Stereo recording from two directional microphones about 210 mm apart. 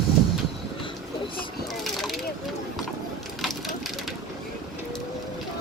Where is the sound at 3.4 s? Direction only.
Centre (ahead or behind).